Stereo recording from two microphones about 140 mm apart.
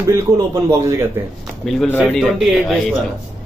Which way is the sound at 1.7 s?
5° left (ahead or behind).